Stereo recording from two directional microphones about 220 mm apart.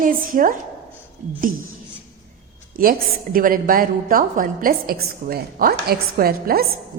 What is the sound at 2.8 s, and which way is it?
A woman's voice, 40° right (ahead or behind).